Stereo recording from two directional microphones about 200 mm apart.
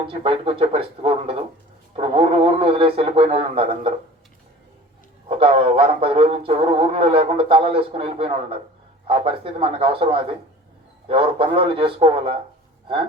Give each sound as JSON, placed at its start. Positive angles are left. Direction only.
{"t": 0.0, "sound": "speech", "side_deg": -25}
{"t": 5.4, "sound": "speech", "side_deg": -30}